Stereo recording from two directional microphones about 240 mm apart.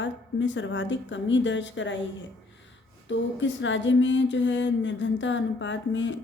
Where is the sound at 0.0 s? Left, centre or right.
Left.